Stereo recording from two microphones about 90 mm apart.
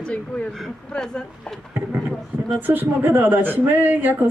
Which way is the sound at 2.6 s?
20° right (ahead or behind).